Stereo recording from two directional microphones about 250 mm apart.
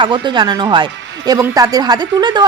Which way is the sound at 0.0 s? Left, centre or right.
Centre.